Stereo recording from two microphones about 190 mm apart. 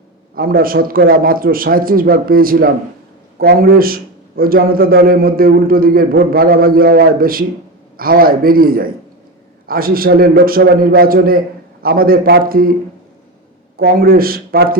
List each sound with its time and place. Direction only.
0.3 s a man's voice: 50° right (ahead or behind)
13.7 s a man's voice: 50° right (ahead or behind)